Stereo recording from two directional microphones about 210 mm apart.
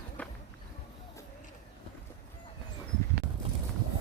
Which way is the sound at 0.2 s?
5° left (ahead or behind).